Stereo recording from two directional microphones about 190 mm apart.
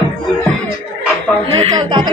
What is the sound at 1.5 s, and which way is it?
Speech, 20° right (ahead or behind).